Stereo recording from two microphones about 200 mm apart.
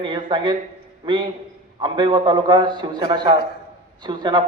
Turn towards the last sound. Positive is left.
turn(degrees=-25)  # may be behind; listen again after turning